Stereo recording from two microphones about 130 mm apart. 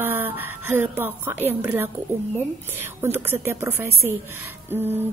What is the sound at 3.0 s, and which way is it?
Speech, 15° right (ahead or behind).